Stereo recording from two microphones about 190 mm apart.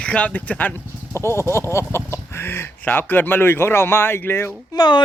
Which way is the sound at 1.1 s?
15° left (ahead or behind).